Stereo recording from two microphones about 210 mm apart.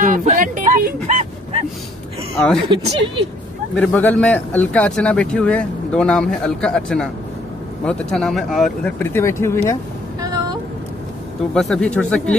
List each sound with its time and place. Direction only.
0.0 s music: 40° right (ahead or behind)
2.3 s speech: centre (ahead or behind)
3.7 s speech: 5° left (ahead or behind)
10.2 s a sound: 20° right (ahead or behind)
11.5 s speech: centre (ahead or behind)